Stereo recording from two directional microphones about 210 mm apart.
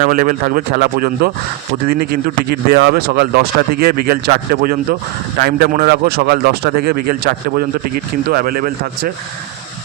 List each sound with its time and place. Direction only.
0.0 s speech: 40° right (ahead or behind)